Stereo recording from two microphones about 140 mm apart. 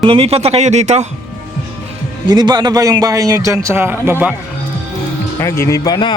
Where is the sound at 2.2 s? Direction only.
30° right (ahead or behind); by 4.3 s 15° right (ahead or behind).